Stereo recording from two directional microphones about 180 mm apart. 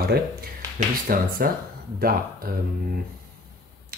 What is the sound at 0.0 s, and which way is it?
Speech, 60° right (ahead or behind).